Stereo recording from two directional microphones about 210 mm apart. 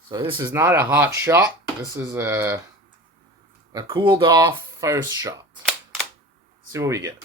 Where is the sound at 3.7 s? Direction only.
25° right (ahead or behind).